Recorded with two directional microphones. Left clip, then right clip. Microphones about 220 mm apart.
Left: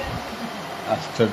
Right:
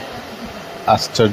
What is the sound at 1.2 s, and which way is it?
Speech, 40° right (ahead or behind).